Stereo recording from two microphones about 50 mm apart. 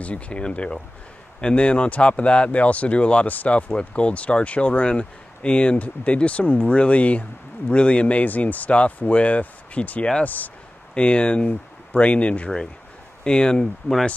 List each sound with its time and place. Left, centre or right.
0.0 s speech: left
11.0 s speech: left